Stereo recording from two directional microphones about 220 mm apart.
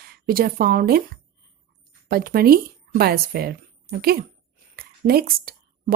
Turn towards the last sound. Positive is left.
turn(degrees=-40)  # may be behind; listen again after turning